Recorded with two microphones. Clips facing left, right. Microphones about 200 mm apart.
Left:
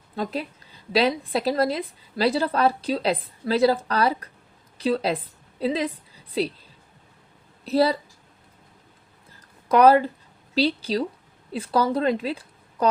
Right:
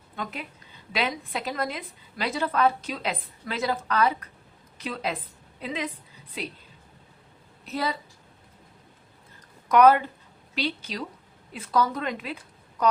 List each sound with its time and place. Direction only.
0.2 s a woman's voice: 35° left (ahead or behind)
7.6 s a woman's voice: 35° left (ahead or behind)
9.6 s a woman's voice: 30° left (ahead or behind)